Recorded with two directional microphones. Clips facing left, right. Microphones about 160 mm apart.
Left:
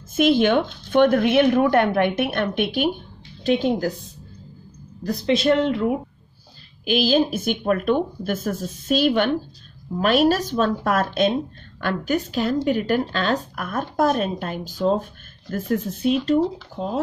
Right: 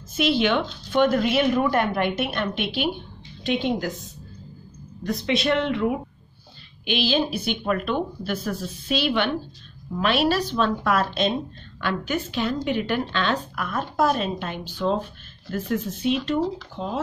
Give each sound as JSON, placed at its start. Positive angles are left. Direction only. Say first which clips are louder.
{"t": 0.1, "sound": "speech", "louder": "left 4 dB", "side_deg": 50}
{"t": 3.4, "sound": "speech", "louder": "left 4 dB", "side_deg": 40}
{"t": 5.2, "sound": "speech", "louder": "left 5 dB", "side_deg": 35}